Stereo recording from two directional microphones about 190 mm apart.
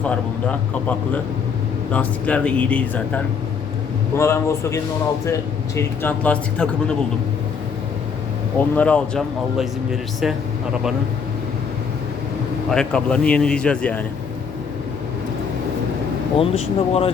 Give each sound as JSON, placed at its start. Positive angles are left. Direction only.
{"t": 0.0, "sound": "speech", "side_deg": 5}
{"t": 4.2, "sound": "speech", "side_deg": 15}
{"t": 8.5, "sound": "speech", "side_deg": 10}
{"t": 12.7, "sound": "speech", "side_deg": 5}
{"t": 16.4, "sound": "speech", "side_deg": 30}